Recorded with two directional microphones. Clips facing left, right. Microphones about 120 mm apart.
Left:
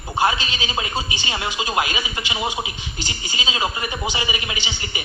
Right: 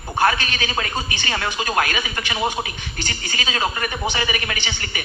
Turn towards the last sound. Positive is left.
turn(degrees=15)  # may be behind; listen again after turning